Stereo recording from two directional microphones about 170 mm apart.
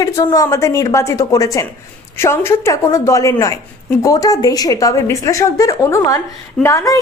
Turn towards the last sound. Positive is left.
turn(degrees=20)  # may be behind; listen again after turning